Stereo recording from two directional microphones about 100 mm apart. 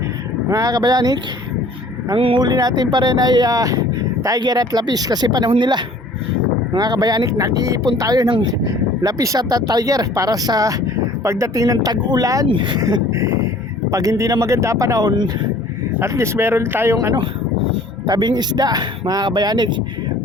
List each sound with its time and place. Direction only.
0.5 s speech: 40° right (ahead or behind)
2.1 s speech: 65° right (ahead or behind)
2.4 s speech: 40° right (ahead or behind)
8.3 s speech: 55° right (ahead or behind)
9.0 s speech: 35° right (ahead or behind)
12.5 s speech: 55° right (ahead or behind)
12.8 s speech: 35° right (ahead or behind)
16.0 s speech: 30° right (ahead or behind)
18.0 s speech: 50° right (ahead or behind)